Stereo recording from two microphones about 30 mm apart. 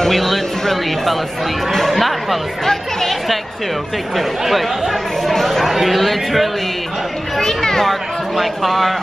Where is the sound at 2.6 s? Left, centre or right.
Centre.